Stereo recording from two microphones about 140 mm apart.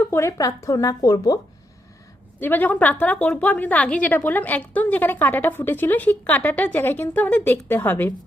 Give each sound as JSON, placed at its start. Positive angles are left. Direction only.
{"t": 0.1, "sound": "speech", "side_deg": 20}
{"t": 2.4, "sound": "a woman's voice", "side_deg": 15}